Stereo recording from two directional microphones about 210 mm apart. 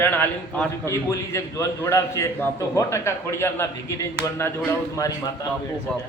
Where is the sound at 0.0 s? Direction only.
10° left (ahead or behind).